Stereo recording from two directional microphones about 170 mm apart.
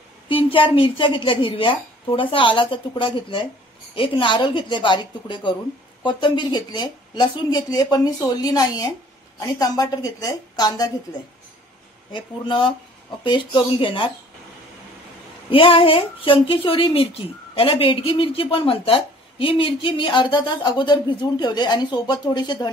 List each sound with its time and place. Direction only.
0.3 s a woman's voice: 30° left (ahead or behind)
12.1 s a woman's voice: 30° left (ahead or behind)
15.5 s a woman's voice: 30° left (ahead or behind)